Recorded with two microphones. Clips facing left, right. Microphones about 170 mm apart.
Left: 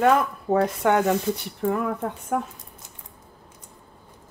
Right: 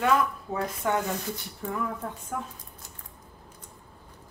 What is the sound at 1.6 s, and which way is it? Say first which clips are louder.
Speech: left 8 dB; 60° left (ahead or behind).